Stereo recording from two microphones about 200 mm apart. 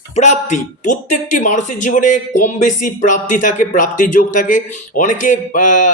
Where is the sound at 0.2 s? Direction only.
35° left (ahead or behind).